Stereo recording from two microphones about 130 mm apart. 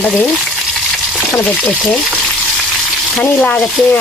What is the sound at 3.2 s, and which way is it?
Speech, 10° left (ahead or behind).